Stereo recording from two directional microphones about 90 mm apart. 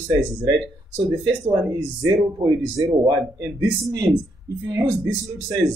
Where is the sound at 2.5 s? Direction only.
40° right (ahead or behind).